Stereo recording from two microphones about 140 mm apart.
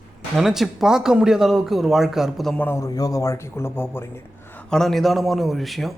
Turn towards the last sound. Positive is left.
turn(degrees=0)  # may be behind; listen again after turning